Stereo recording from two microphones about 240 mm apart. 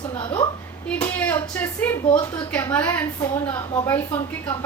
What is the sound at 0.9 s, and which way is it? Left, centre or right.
Speech, centre.